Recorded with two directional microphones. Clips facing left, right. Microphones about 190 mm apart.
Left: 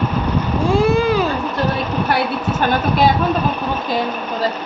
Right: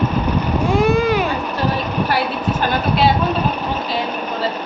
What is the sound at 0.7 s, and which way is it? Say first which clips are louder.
Vehicle: left 1 dB; 30° left (ahead or behind).